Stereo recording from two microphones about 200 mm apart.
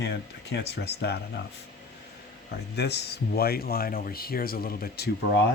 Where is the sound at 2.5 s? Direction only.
55° left (ahead or behind).